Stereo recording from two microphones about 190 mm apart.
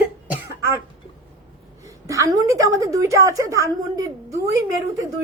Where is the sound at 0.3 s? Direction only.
15° right (ahead or behind).